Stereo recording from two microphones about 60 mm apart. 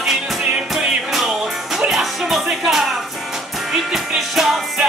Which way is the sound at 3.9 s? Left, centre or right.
Centre.